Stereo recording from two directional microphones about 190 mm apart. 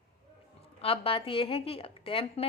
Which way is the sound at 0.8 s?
30° left (ahead or behind).